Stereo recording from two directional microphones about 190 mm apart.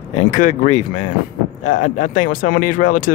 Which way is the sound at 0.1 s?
40° left (ahead or behind).